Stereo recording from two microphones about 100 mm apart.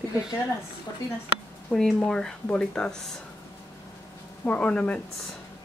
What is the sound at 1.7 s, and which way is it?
Speech, 5° left (ahead or behind).